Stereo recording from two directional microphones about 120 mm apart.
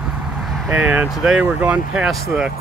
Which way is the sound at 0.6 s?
15° right (ahead or behind).